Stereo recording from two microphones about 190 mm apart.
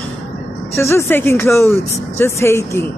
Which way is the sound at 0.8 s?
15° left (ahead or behind).